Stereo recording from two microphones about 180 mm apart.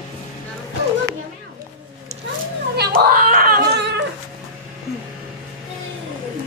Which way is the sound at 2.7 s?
55° right (ahead or behind).